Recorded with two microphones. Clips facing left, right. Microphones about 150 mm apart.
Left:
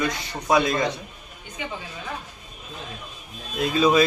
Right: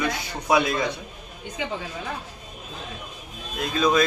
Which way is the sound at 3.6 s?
5° left (ahead or behind).